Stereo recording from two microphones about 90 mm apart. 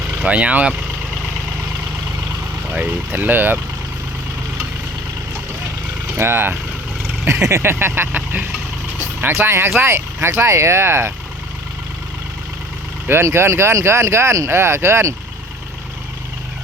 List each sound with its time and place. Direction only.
0.2 s speech: 15° right (ahead or behind)
2.6 s speech: 20° right (ahead or behind)
6.1 s speech: 25° right (ahead or behind)
13.1 s speech: 30° right (ahead or behind)